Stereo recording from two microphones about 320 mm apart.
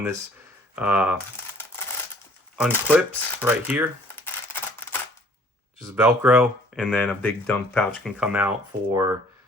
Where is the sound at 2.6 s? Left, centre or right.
Centre.